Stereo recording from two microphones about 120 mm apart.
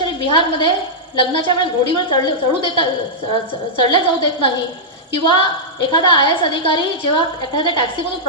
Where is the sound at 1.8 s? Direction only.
40° left (ahead or behind).